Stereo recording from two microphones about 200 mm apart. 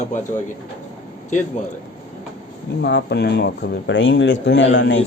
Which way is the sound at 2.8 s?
55° left (ahead or behind).